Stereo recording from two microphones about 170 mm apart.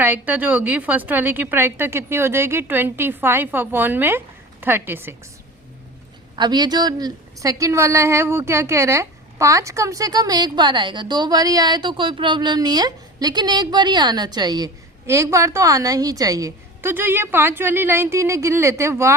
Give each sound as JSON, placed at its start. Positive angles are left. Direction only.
{"t": 0.0, "sound": "a woman's voice", "side_deg": -10}
{"t": 6.3, "sound": "a woman's voice", "side_deg": -25}